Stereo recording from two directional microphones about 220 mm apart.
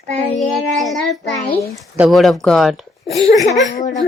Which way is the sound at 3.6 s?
35° left (ahead or behind).